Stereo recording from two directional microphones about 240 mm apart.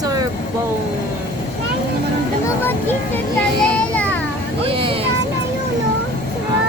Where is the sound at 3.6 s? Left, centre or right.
Centre.